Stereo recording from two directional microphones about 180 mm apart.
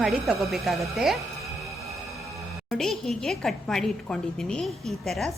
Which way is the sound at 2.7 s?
Centre (ahead or behind).